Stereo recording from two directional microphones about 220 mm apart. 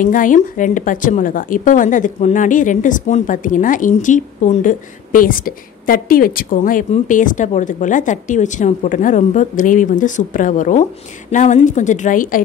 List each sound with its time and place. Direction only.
0.0 s a woman's voice: 35° left (ahead or behind)